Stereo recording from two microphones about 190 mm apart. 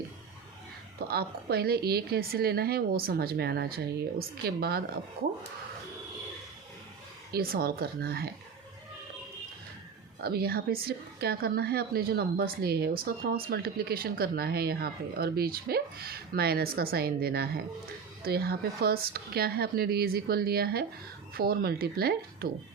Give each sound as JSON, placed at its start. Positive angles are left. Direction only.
{"t": 0.9, "sound": "a woman's voice", "side_deg": -55}
{"t": 7.3, "sound": "speech", "side_deg": -50}
{"t": 10.2, "sound": "a woman's voice", "side_deg": -55}